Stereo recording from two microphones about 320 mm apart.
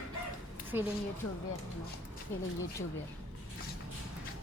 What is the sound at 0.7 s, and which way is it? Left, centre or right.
Speech, centre.